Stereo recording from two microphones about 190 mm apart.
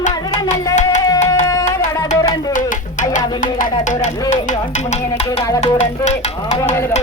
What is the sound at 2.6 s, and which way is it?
Music, 40° left (ahead or behind).